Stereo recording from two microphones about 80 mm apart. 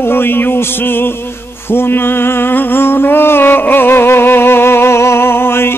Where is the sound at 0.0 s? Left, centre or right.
Left.